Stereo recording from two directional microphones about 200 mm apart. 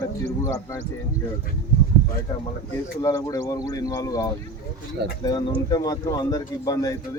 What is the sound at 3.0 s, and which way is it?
Speech, 15° left (ahead or behind).